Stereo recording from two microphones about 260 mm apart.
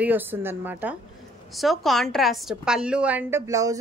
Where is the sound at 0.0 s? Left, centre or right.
Centre.